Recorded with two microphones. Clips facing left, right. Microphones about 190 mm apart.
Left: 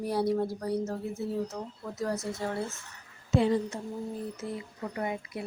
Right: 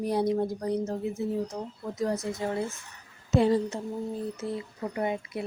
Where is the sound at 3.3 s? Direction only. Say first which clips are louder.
Right 2 dB; 40° right (ahead or behind).